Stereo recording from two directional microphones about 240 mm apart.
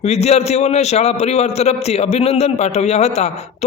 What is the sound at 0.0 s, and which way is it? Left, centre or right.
A man's voice, left.